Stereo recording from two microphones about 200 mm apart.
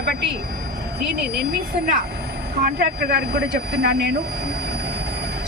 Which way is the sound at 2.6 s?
50° right (ahead or behind).